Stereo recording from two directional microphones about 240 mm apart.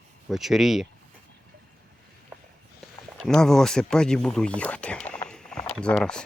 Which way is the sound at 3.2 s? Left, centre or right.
Centre.